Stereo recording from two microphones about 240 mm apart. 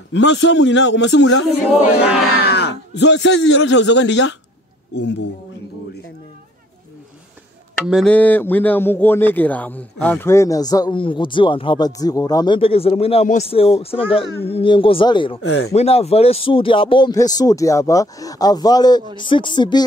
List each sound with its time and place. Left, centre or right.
0.1 s a man's voice: left
7.7 s speech: centre